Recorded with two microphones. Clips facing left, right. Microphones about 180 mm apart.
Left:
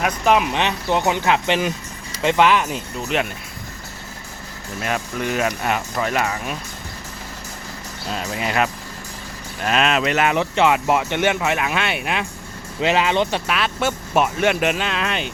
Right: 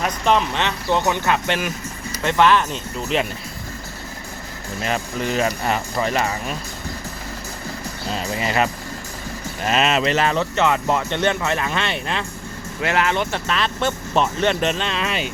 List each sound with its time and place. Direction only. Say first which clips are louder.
0.0 s speech: left 1 dB; 10° left (ahead or behind)
4.8 s speech: even; 5° left (ahead or behind)
8.1 s speech: even; centre (ahead or behind)
10.3 s speech: left 2 dB; 15° left (ahead or behind); by 15.3 s centre (ahead or behind)